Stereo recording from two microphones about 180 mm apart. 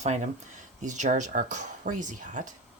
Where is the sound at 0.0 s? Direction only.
40° right (ahead or behind).